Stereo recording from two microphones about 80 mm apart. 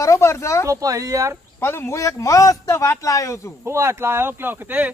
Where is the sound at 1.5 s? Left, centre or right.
Left.